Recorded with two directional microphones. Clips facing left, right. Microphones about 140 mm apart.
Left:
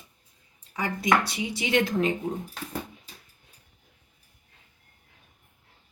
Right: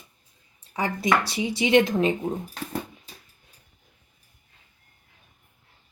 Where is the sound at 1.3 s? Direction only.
25° right (ahead or behind).